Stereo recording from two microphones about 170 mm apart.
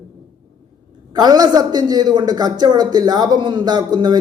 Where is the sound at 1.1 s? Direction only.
25° right (ahead or behind).